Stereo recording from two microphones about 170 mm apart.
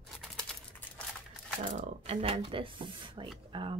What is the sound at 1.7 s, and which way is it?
Speech, 35° right (ahead or behind).